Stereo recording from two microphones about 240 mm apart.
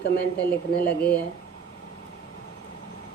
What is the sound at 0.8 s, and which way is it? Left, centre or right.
Speech, centre.